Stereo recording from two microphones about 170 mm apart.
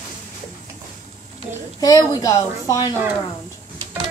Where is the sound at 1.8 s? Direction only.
20° left (ahead or behind).